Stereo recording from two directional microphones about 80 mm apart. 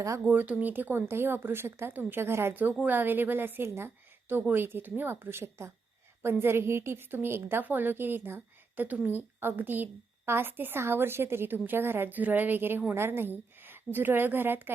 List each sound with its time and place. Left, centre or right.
0.3 s a woman's voice: right